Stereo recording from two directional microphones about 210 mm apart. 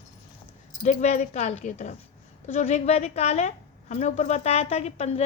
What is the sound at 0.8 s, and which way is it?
A woman's voice, 35° left (ahead or behind).